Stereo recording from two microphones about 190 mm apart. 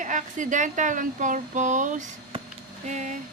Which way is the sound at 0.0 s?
40° right (ahead or behind).